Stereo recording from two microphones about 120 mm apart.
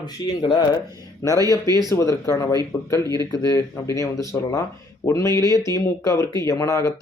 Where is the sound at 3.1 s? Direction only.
30° left (ahead or behind).